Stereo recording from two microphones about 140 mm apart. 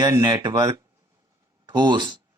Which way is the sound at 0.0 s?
30° right (ahead or behind).